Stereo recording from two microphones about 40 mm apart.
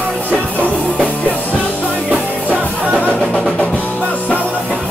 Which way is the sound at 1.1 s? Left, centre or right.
Left.